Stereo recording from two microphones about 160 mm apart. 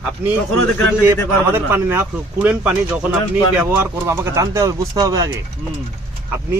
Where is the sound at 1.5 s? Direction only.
15° right (ahead or behind).